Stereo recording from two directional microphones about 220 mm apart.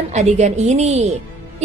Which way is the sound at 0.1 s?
30° right (ahead or behind).